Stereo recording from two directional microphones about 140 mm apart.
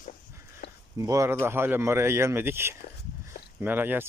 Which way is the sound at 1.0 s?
20° right (ahead or behind).